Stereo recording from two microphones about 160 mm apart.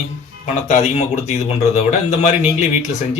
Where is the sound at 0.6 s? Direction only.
45° left (ahead or behind).